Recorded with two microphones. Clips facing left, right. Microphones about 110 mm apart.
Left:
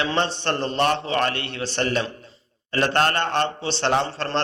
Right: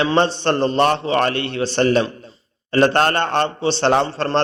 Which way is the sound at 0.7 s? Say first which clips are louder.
Right 3 dB; 45° right (ahead or behind).